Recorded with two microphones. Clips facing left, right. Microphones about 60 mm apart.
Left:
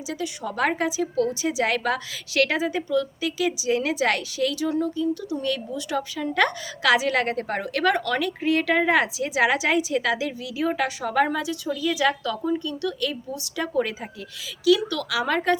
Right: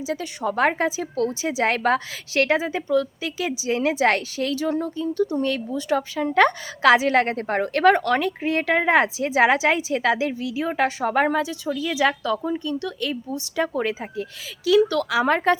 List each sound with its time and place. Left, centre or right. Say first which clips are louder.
0.1 s a woman's voice: right 3 dB; right